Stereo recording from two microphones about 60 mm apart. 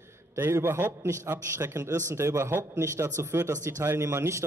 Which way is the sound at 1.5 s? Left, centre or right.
Right.